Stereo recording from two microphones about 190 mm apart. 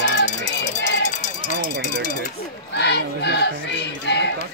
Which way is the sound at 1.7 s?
60° right (ahead or behind).